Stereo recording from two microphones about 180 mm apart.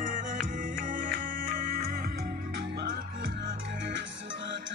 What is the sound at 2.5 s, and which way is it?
Music, 65° right (ahead or behind).